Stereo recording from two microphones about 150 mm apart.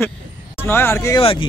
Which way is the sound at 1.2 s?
35° left (ahead or behind).